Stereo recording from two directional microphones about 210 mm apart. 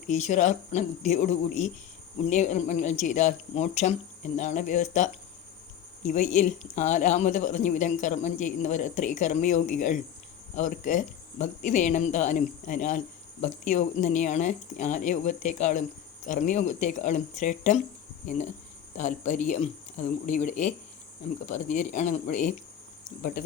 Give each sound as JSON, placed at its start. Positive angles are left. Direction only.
{"t": 0.1, "sound": "a man's voice", "side_deg": 35}